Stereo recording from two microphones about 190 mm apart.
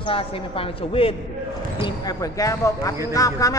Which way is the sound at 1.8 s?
20° left (ahead or behind).